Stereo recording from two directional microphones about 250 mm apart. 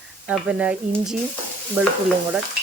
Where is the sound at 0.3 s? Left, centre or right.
Centre.